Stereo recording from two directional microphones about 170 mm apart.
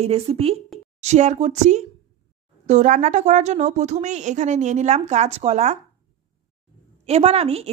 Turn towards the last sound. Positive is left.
turn(degrees=-35)  # may be behind; listen again after turning